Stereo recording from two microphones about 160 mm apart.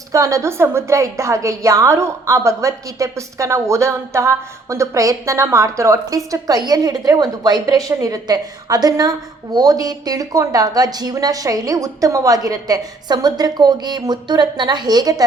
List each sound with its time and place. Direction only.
0.1 s a woman's voice: 20° right (ahead or behind)